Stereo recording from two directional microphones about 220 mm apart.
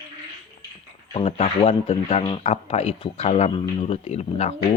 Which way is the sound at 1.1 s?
25° left (ahead or behind).